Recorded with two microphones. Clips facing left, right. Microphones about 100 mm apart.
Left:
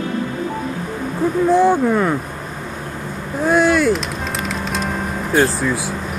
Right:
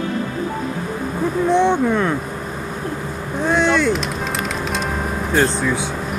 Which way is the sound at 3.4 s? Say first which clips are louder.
Left 2 dB; 5° left (ahead or behind).